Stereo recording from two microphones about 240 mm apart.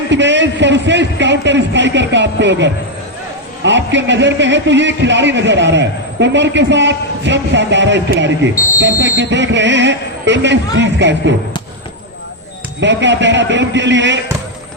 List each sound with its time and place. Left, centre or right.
0.1 s a man's voice: right
12.8 s a man's voice: right